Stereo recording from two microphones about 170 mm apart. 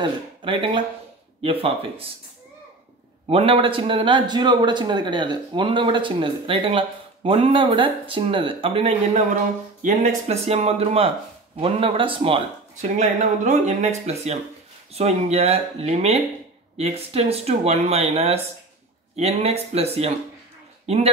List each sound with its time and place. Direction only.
0.0 s speech: 30° right (ahead or behind)
3.3 s a man's voice: 35° right (ahead or behind)
12.9 s speech: 45° right (ahead or behind)